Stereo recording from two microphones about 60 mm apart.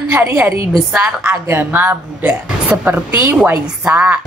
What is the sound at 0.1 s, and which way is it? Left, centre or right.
A woman's voice, right.